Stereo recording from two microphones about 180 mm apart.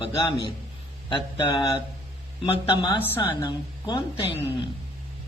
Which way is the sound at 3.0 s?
15° left (ahead or behind).